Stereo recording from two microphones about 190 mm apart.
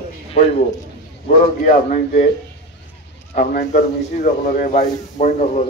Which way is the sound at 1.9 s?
40° left (ahead or behind).